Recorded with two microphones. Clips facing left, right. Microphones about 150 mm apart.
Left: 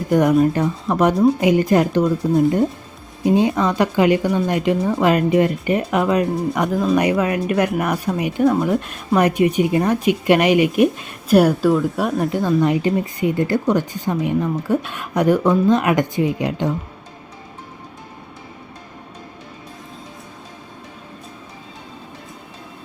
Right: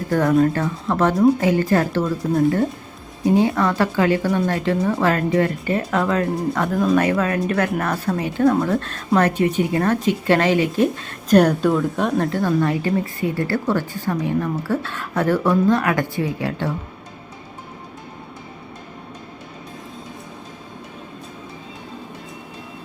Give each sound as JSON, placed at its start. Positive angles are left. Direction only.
{"t": 0.1, "sound": "a woman's voice", "side_deg": 15}
{"t": 12.2, "sound": "a woman's voice", "side_deg": 15}